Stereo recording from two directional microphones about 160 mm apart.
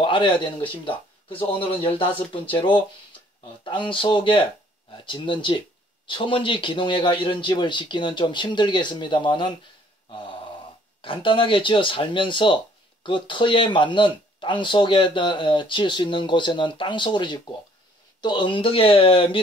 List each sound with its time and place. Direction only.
0.0 s a man's voice: 30° left (ahead or behind)
11.0 s speech: 35° left (ahead or behind)